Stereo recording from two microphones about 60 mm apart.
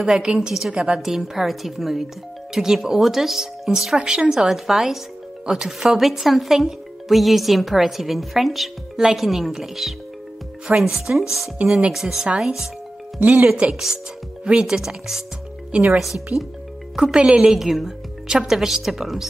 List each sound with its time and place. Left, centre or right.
0.0 s a woman's voice: centre
13.2 s speech: right
13.6 s a woman's voice: right; by 19.2 s centre